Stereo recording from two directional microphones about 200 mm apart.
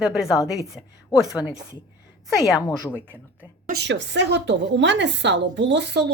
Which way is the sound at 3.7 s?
55° right (ahead or behind).